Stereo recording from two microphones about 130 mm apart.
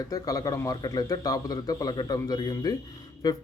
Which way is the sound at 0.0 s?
30° left (ahead or behind).